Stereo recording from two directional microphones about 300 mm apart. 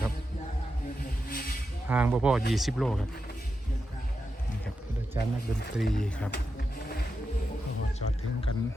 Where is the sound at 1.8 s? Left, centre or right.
Centre.